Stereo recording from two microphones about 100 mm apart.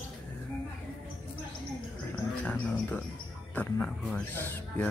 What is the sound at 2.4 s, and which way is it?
Speech, 15° left (ahead or behind).